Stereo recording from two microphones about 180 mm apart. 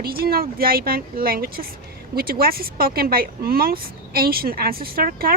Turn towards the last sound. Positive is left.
turn(degrees=-55)  # may be behind; listen again after turning